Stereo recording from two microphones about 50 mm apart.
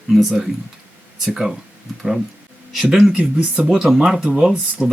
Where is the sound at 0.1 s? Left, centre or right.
Centre.